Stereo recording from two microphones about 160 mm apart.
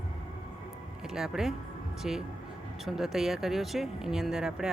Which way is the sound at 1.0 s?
5° right (ahead or behind).